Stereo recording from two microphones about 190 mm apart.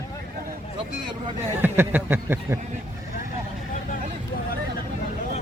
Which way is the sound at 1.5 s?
10° right (ahead or behind).